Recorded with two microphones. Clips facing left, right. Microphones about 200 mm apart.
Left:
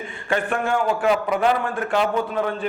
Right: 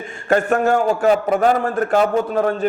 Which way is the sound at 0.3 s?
45° right (ahead or behind).